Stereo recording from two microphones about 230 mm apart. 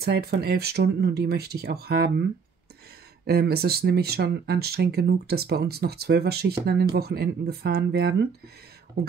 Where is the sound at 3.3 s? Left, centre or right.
Right.